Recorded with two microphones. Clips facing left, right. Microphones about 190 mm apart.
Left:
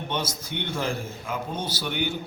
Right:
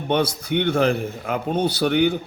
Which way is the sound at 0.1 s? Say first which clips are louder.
Right 12 dB; 60° right (ahead or behind).